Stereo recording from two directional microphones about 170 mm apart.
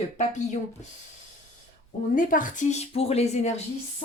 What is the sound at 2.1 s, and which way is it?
A woman's voice, 50° left (ahead or behind).